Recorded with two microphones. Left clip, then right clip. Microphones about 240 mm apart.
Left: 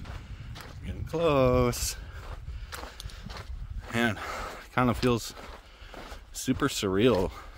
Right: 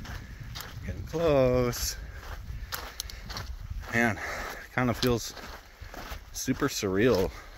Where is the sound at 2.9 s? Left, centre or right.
Right.